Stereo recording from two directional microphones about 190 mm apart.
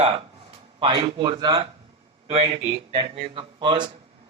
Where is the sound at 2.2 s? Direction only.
30° right (ahead or behind).